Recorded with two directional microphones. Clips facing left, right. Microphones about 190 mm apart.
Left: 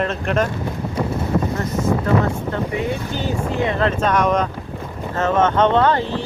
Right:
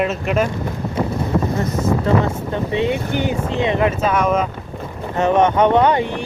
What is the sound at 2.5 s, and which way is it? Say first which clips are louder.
Speech: right 3 dB; 20° right (ahead or behind).